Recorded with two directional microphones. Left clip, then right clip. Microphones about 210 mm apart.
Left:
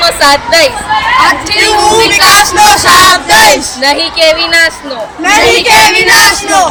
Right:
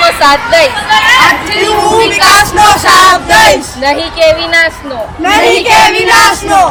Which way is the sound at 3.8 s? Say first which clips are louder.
Left 1 dB; 5° left (ahead or behind).